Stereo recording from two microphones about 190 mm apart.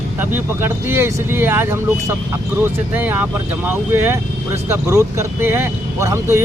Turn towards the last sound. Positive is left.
turn(degrees=-15)  # may be behind; listen again after turning